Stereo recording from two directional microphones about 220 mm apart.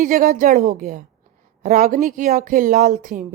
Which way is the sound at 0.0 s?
40° right (ahead or behind).